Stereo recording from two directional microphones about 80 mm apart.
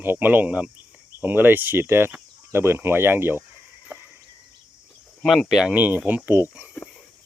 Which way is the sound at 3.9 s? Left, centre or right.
Right.